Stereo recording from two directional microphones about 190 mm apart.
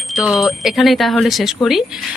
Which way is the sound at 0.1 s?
Centre (ahead or behind).